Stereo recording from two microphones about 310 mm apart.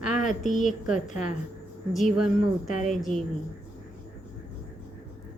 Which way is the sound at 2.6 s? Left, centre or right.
Left.